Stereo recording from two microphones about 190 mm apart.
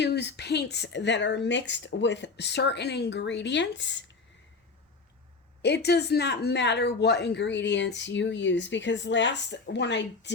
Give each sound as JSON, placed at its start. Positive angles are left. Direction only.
{"t": 0.0, "sound": "speech", "side_deg": 65}
{"t": 5.6, "sound": "speech", "side_deg": 60}